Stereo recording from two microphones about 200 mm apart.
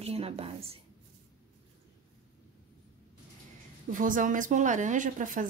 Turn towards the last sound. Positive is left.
turn(degrees=-40)  # may be behind; listen again after turning